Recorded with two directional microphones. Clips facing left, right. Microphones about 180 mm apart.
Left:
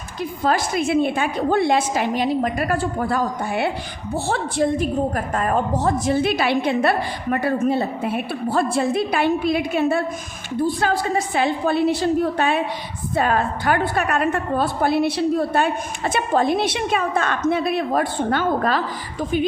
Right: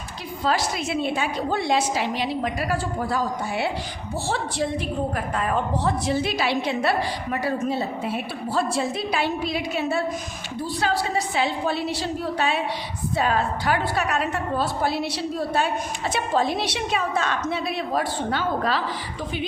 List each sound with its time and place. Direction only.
0.4 s a woman's voice: 50° left (ahead or behind)